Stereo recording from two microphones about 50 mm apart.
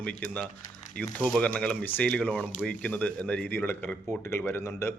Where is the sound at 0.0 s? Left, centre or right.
Left.